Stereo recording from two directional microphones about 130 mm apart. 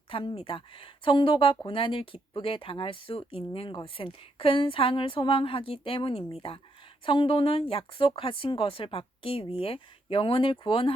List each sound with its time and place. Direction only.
0.1 s a woman's voice: 45° left (ahead or behind)